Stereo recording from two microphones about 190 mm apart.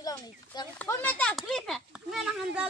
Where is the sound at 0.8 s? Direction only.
10° left (ahead or behind).